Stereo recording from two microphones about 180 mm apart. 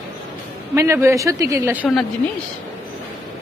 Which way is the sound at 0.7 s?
15° right (ahead or behind).